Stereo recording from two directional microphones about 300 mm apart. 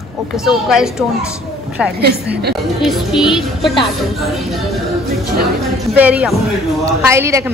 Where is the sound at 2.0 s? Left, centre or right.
Right.